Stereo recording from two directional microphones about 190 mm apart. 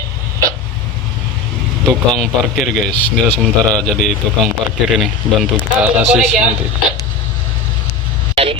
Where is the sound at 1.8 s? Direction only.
5° left (ahead or behind).